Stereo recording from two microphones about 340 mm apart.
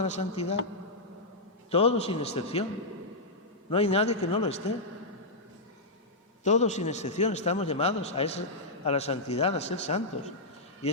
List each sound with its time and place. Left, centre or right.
0.0 s a man's voice: centre
1.7 s a man's voice: centre
3.7 s a man's voice: centre
6.4 s a man's voice: centre